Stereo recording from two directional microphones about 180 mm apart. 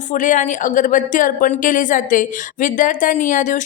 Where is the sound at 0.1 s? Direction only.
45° left (ahead or behind).